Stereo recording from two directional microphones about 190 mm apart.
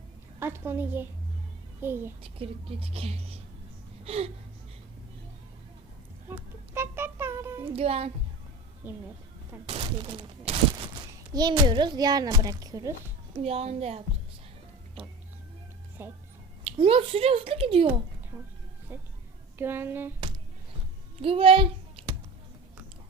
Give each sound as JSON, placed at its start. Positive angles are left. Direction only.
{"t": 0.3, "sound": "a woman's voice", "side_deg": -10}
{"t": 2.2, "sound": "a woman's voice", "side_deg": -30}
{"t": 4.0, "sound": "gasp", "side_deg": -30}
{"t": 6.2, "sound": "a sound", "side_deg": -10}
{"t": 7.7, "sound": "a woman's voice", "side_deg": -30}
{"t": 9.6, "sound": "a child's voice", "side_deg": -30}
{"t": 13.4, "sound": "a woman's voice", "side_deg": -35}
{"t": 16.0, "sound": "a woman's voice", "side_deg": -10}
{"t": 16.6, "sound": "a child's voice", "side_deg": -30}
{"t": 18.9, "sound": "a woman's voice", "side_deg": -10}
{"t": 21.2, "sound": "speech", "side_deg": -30}